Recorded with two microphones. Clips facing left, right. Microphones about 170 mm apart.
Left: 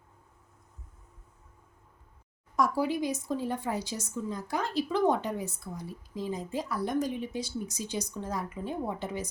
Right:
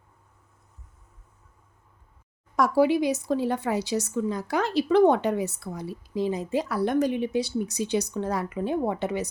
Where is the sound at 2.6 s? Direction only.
75° right (ahead or behind).